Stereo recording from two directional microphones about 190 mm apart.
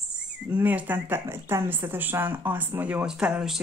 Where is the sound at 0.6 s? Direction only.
10° right (ahead or behind).